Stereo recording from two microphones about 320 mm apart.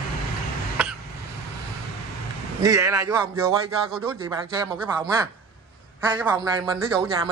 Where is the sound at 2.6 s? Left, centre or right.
Centre.